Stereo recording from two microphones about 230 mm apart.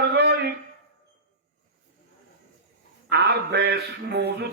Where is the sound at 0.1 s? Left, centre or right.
Right.